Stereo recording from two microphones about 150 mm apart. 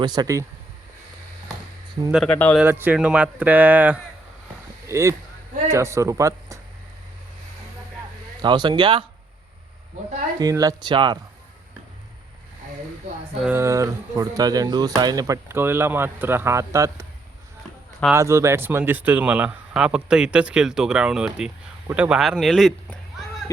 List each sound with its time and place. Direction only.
0.0 s speech: 30° right (ahead or behind)
2.2 s speech: 10° left (ahead or behind)
2.6 s speech: 15° right (ahead or behind)
8.4 s speech: 30° right (ahead or behind)
10.4 s speech: 25° right (ahead or behind)
13.4 s speech: 15° right (ahead or behind)
18.1 s a man's voice: 20° right (ahead or behind); by 23.2 s centre (ahead or behind)